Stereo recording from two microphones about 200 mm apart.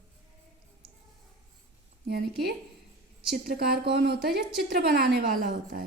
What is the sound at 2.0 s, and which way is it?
Speech, 50° right (ahead or behind).